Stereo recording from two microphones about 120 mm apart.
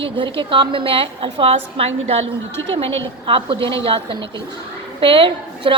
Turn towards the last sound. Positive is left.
turn(degrees=-45)  # may be behind; listen again after turning